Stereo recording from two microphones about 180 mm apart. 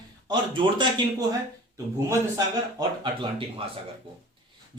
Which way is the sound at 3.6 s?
30° right (ahead or behind).